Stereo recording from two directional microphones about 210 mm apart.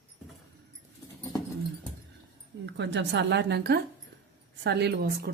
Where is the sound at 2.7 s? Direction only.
55° right (ahead or behind).